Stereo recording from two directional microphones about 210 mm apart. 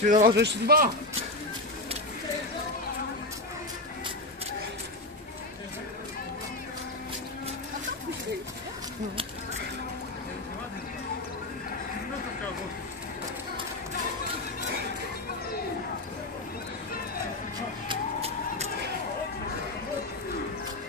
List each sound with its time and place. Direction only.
0.0 s a man's voice: 40° right (ahead or behind)
0.3 s a man's voice: 55° right (ahead or behind)